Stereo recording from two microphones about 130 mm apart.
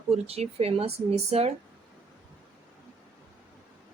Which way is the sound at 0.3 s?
50° right (ahead or behind).